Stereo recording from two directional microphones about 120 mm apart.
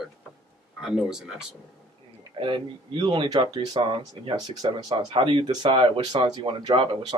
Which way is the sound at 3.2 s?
30° right (ahead or behind).